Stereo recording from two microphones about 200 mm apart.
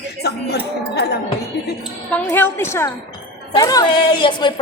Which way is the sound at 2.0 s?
10° left (ahead or behind).